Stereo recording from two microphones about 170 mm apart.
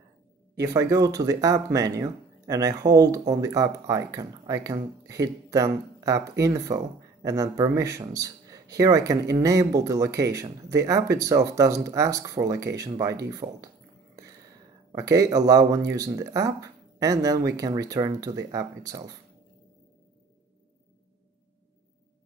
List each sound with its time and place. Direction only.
0.6 s a man's voice: 20° right (ahead or behind)
15.0 s a man's voice: 20° right (ahead or behind)